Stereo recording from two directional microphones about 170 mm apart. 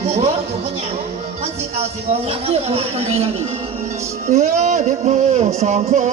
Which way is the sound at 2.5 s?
35° right (ahead or behind).